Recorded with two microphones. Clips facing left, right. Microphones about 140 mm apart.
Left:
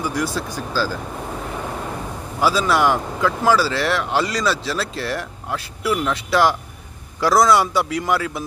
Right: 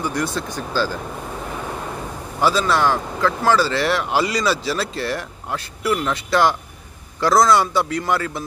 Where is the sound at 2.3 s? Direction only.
5° left (ahead or behind).